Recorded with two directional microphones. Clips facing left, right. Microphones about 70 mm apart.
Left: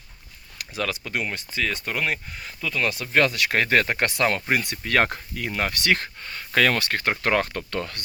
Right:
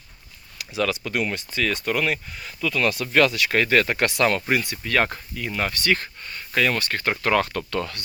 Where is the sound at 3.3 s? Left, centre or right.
Left.